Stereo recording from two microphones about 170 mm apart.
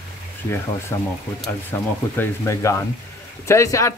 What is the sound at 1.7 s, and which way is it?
Speech, 10° left (ahead or behind).